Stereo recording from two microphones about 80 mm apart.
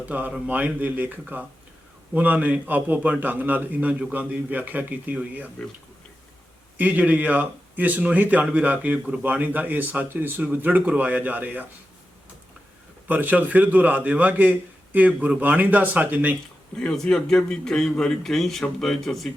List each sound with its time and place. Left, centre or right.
0.0 s speech: centre
6.7 s speech: right
13.1 s speech: right
16.8 s a man's voice: centre